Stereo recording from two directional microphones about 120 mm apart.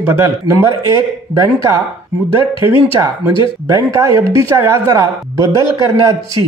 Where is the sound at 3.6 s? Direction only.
25° right (ahead or behind).